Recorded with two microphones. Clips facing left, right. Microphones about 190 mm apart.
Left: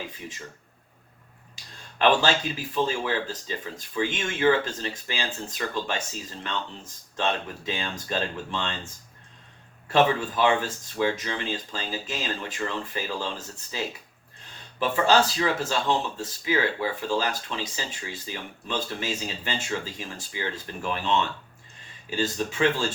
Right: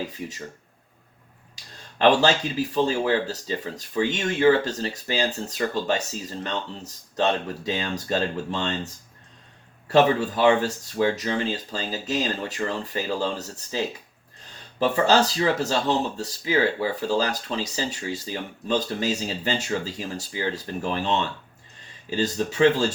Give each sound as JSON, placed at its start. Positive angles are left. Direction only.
{"t": 0.0, "sound": "speech", "side_deg": -40}
{"t": 2.0, "sound": "speech", "side_deg": -40}
{"t": 9.9, "sound": "speech", "side_deg": -40}